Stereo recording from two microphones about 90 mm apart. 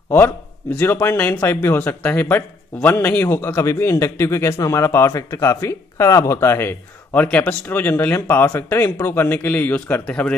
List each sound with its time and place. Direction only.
0.7 s a man's voice: 25° left (ahead or behind)
7.2 s a man's voice: 15° left (ahead or behind)